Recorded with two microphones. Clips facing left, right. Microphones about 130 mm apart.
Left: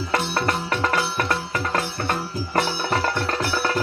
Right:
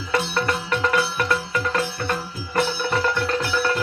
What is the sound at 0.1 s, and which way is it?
Music, 50° left (ahead or behind).